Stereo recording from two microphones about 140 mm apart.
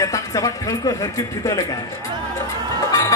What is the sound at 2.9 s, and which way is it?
Music, 25° left (ahead or behind).